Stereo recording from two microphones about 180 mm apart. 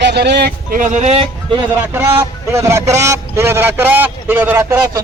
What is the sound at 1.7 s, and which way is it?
A man's voice, 15° right (ahead or behind).